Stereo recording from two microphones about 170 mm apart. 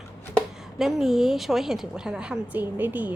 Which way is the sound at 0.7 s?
Centre (ahead or behind).